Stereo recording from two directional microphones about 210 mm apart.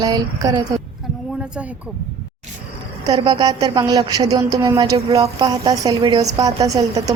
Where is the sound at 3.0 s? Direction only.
20° right (ahead or behind).